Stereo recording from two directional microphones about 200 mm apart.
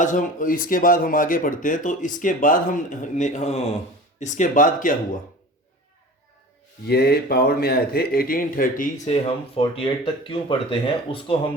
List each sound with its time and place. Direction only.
0.0 s speech: 40° left (ahead or behind)
6.8 s speech: 55° left (ahead or behind)
9.2 s speech: 25° left (ahead or behind)